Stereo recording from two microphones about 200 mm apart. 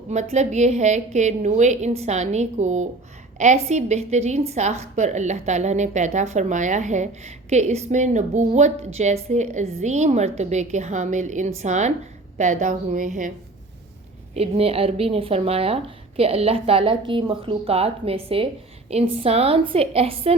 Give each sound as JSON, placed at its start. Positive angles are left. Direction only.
{"t": 0.1, "sound": "a woman's voice", "side_deg": -35}
{"t": 14.3, "sound": "a woman's voice", "side_deg": -30}